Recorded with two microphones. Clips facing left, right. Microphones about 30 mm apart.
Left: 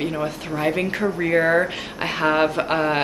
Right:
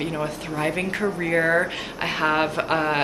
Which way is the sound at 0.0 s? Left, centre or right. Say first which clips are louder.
Left 2 dB; centre.